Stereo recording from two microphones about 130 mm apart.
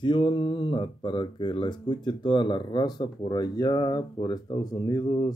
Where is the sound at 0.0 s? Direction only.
40° left (ahead or behind).